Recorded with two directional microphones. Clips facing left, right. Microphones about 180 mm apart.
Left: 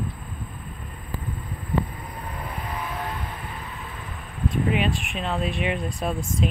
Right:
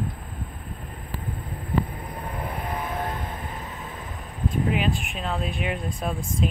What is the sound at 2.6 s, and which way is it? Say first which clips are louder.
Vehicle: right 1 dB; 50° right (ahead or behind).